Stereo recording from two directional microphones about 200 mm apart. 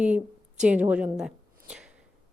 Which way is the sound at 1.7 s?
5° right (ahead or behind).